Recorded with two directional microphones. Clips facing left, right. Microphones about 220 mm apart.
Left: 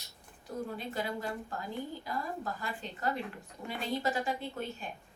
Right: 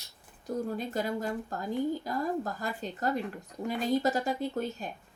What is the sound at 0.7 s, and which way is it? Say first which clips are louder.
A woman's voice: right 5 dB; 45° right (ahead or behind).